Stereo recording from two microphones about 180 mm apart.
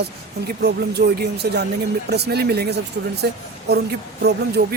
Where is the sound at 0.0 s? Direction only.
65° right (ahead or behind).